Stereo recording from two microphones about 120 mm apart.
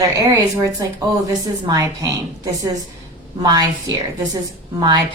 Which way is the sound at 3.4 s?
30° right (ahead or behind).